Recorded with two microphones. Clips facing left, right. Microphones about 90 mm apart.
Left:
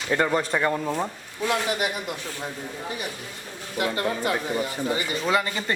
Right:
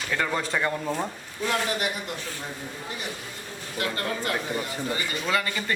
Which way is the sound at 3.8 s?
20° left (ahead or behind).